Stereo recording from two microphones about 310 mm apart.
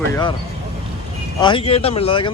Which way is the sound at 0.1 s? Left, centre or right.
Centre.